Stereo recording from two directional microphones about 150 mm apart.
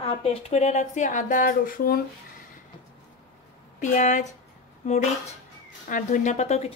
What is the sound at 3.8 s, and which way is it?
Speech, 55° left (ahead or behind).